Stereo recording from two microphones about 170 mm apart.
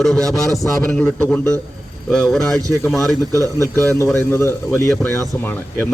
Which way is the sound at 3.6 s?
15° left (ahead or behind).